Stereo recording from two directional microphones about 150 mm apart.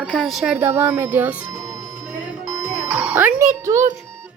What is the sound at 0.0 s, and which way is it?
Speech, centre (ahead or behind).